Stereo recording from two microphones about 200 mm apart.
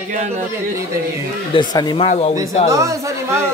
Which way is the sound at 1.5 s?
20° left (ahead or behind).